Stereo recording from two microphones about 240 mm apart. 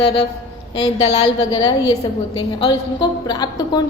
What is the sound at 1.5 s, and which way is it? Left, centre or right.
A woman's voice, centre.